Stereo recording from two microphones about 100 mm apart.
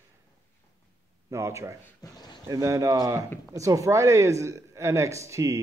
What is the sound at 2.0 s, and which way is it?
Speech, 45° left (ahead or behind).